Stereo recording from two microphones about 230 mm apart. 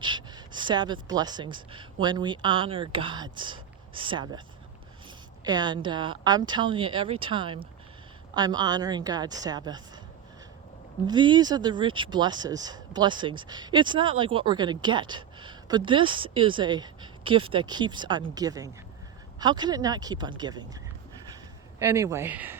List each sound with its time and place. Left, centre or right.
0.0 s speech: centre
5.5 s a woman's voice: centre
11.0 s a woman's voice: centre
21.8 s a woman's voice: centre